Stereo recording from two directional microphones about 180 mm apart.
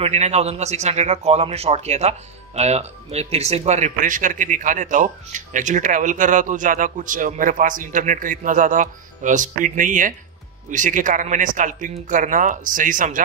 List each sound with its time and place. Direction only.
0.0 s a man's voice: 35° right (ahead or behind)